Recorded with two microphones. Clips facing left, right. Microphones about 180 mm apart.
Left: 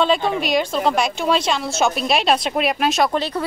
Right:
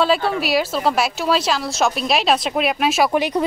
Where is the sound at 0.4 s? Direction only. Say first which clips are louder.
Even; 5° right (ahead or behind).